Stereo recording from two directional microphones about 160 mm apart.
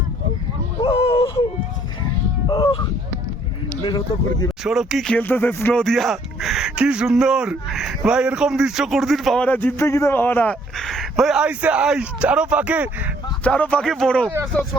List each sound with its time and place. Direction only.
0.8 s dog: 35° left (ahead or behind)
2.5 s honk: 30° left (ahead or behind)
3.8 s speech: 25° left (ahead or behind)
4.6 s speech: centre (ahead or behind)
13.4 s speech: 10° left (ahead or behind)